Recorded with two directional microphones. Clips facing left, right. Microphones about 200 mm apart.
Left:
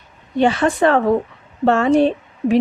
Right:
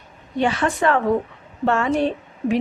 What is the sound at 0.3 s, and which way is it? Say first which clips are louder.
Speech: left 5 dB; 30° left (ahead or behind).